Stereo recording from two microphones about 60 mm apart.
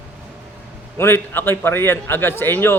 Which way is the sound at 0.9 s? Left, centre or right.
Left.